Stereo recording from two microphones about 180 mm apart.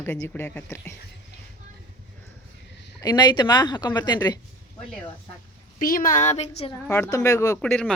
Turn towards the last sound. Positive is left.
turn(degrees=15)  # may be behind; listen again after turning